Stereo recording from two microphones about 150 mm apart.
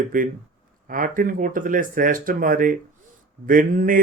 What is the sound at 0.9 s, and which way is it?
Speech, 65° right (ahead or behind).